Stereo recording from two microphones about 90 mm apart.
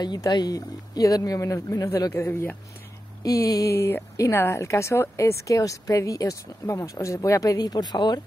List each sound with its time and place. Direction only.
0.0 s speech: 50° left (ahead or behind); by 2.5 s 30° left (ahead or behind)
3.2 s speech: 40° left (ahead or behind)
3.7 s speech: 30° left (ahead or behind); by 8.2 s 50° left (ahead or behind)